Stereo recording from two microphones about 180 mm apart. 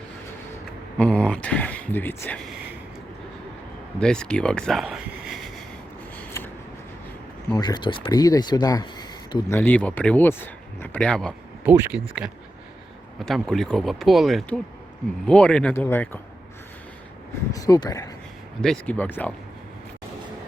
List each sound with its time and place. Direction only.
0.9 s speech: 5° left (ahead or behind)
4.0 s speech: 5° left (ahead or behind)
6.1 s a sound: 10° left (ahead or behind)
7.5 s speech: 25° left (ahead or behind)
9.5 s speech: 10° left (ahead or behind)
11.6 s speech: 10° right (ahead or behind)
13.1 s speech: centre (ahead or behind)
17.5 s speech: 20° left (ahead or behind)
18.6 s speech: 5° left (ahead or behind)